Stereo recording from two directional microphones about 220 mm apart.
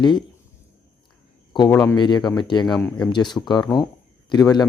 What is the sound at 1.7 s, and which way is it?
Speech, 10° left (ahead or behind).